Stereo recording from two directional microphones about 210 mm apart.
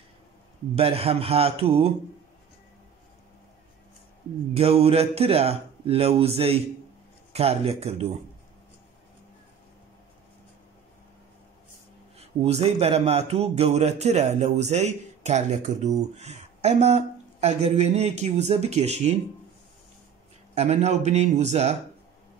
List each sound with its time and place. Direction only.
0.7 s speech: 25° right (ahead or behind)
4.6 s speech: 30° right (ahead or behind)
12.2 s speech: 30° right (ahead or behind)
20.5 s speech: 30° right (ahead or behind)